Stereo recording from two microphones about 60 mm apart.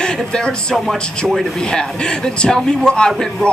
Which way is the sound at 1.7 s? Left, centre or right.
Centre.